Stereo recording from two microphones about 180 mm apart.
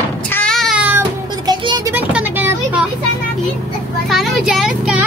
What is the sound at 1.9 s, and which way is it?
Vehicle, 10° right (ahead or behind).